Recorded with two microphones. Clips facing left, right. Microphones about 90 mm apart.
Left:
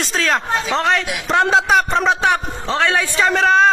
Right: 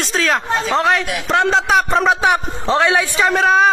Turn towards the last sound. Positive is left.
turn(degrees=-10)  # may be behind; listen again after turning